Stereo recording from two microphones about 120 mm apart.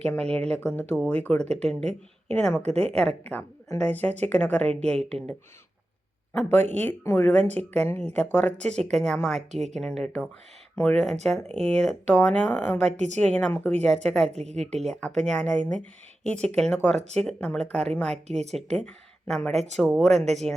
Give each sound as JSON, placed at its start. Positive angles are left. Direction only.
{"t": 0.0, "sound": "a woman's voice", "side_deg": 10}
{"t": 2.6, "sound": "a woman's voice", "side_deg": -65}
{"t": 2.9, "sound": "a woman's voice", "side_deg": 5}
{"t": 6.8, "sound": "a woman's voice", "side_deg": 20}
{"t": 14.3, "sound": "a woman's voice", "side_deg": -65}
{"t": 15.0, "sound": "a woman's voice", "side_deg": 5}